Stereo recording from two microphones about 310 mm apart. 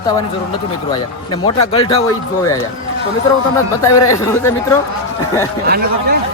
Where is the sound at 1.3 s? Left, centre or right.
Centre.